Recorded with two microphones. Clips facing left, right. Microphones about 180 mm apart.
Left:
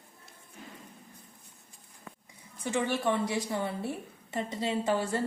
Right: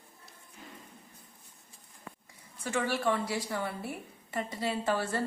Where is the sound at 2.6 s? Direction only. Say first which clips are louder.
Left 1 dB; 20° left (ahead or behind).